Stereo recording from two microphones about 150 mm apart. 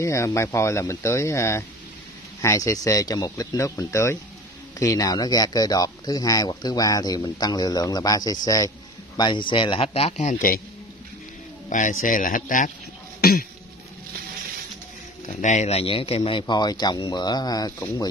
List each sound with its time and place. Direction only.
0.0 s speech: 20° left (ahead or behind); by 10.6 s 60° left (ahead or behind)
11.7 s speech: 60° left (ahead or behind)
13.2 s cough: 75° left (ahead or behind)
15.2 s speech: 55° left (ahead or behind); by 17.8 s 25° left (ahead or behind)